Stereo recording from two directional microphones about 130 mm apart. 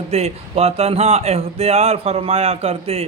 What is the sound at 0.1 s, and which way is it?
Speech, 55° right (ahead or behind).